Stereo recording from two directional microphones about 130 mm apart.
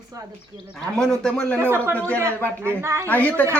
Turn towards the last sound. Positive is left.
turn(degrees=15)  # may be behind; listen again after turning